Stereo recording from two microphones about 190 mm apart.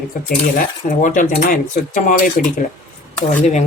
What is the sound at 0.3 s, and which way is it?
Speech, 45° left (ahead or behind).